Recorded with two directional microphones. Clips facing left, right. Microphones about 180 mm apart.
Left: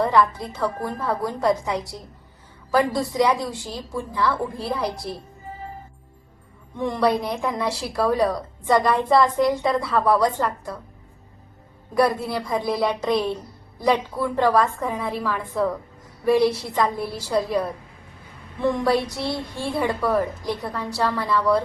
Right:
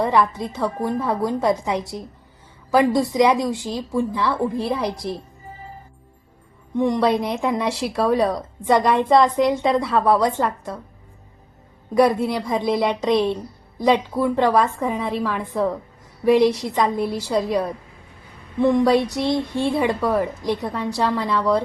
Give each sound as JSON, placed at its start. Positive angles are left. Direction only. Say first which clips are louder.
{"t": 0.0, "sound": "speech", "louder": "even", "side_deg": -20}
{"t": 6.7, "sound": "speech", "louder": "right 3 dB", "side_deg": -15}
{"t": 12.0, "sound": "a woman's voice", "louder": "right 4 dB", "side_deg": -20}
{"t": 18.6, "sound": "a woman's voice", "louder": "right 5 dB", "side_deg": -15}